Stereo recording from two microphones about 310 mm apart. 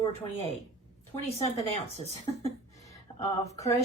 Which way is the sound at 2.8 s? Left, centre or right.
Centre.